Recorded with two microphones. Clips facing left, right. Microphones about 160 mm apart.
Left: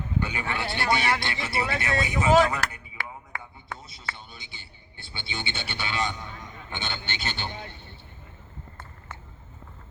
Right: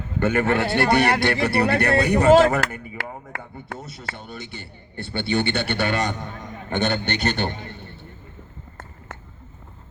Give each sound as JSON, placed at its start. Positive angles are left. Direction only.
{"t": 0.2, "sound": "a man's voice", "side_deg": -55}
{"t": 2.5, "sound": "a sound", "side_deg": -55}
{"t": 3.8, "sound": "a man's voice", "side_deg": -55}